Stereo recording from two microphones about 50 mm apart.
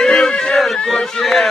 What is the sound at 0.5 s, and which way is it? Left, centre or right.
Speech, centre.